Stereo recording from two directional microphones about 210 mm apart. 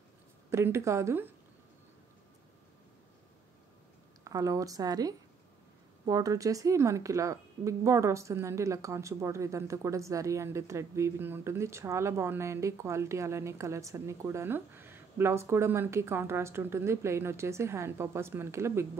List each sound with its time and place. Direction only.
0.5 s a woman's voice: 10° right (ahead or behind)
4.2 s a woman's voice: 15° right (ahead or behind)